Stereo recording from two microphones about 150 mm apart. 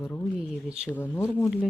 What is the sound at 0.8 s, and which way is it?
Speech, 10° left (ahead or behind).